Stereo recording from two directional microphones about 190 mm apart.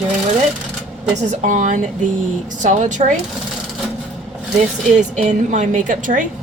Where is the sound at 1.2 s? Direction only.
40° right (ahead or behind).